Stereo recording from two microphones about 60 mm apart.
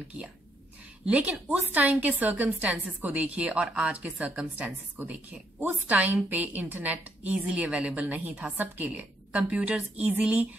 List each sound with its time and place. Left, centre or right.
1.7 s a woman's voice: right